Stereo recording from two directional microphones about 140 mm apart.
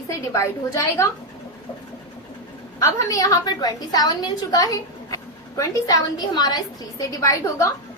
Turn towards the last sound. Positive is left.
turn(degrees=25)  # may be behind; listen again after turning